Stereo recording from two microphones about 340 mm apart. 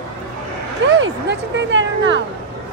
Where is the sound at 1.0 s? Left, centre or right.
Right.